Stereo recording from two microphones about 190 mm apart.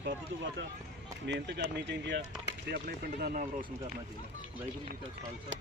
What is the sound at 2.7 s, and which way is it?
Speech, 55° right (ahead or behind).